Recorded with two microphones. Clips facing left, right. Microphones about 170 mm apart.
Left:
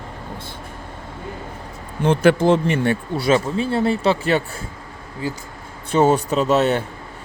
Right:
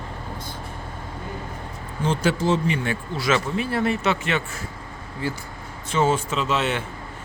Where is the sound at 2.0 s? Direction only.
60° left (ahead or behind).